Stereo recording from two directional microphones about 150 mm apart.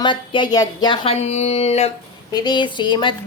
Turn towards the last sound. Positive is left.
turn(degrees=30)  # may be behind; listen again after turning